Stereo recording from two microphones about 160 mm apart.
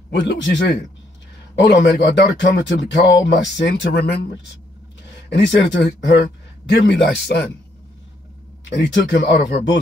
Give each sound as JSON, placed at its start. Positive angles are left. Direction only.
{"t": 0.1, "sound": "speech", "side_deg": 90}
{"t": 5.3, "sound": "speech", "side_deg": 90}
{"t": 8.6, "sound": "speech", "side_deg": 90}